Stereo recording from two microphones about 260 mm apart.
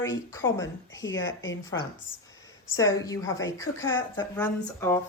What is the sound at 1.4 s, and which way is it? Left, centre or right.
Speech, centre.